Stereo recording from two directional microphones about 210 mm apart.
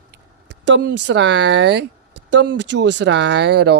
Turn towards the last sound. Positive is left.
turn(degrees=-55)  # may be behind; listen again after turning